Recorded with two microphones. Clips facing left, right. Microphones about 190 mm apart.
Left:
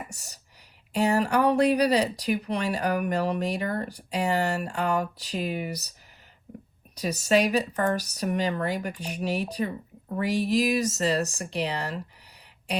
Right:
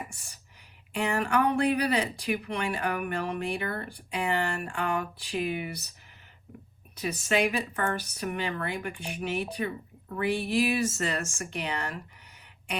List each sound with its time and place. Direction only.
0.1 s a woman's voice: 40° left (ahead or behind)
6.9 s speech: 40° left (ahead or behind)